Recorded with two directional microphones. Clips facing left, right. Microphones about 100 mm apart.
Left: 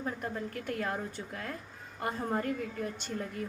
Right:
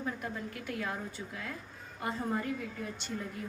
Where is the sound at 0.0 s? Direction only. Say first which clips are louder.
Left 2 dB; 45° left (ahead or behind).